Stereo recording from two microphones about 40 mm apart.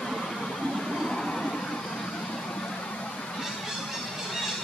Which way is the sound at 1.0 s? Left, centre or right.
Centre.